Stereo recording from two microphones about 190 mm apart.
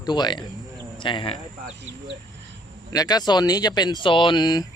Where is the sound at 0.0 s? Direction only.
20° left (ahead or behind).